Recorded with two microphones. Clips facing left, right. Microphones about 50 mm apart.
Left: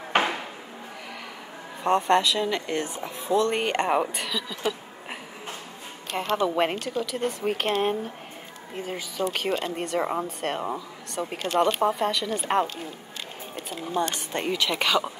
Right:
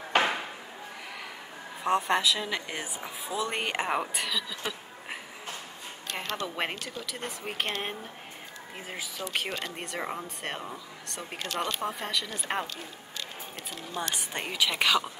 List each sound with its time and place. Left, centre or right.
0.1 s a sound: left
1.8 s speech: centre
6.1 s speech: centre
9.5 s speech: centre
9.8 s speech: centre
11.3 s speech: left
11.8 s speech: centre
14.3 s speech: centre